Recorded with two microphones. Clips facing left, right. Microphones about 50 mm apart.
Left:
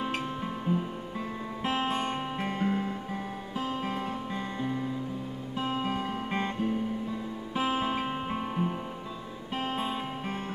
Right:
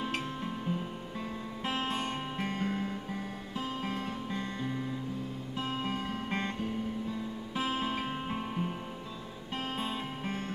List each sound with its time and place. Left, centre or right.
0.0 s music: centre